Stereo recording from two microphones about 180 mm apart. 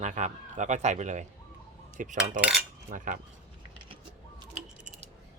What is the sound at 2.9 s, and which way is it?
Cutlery, 50° right (ahead or behind).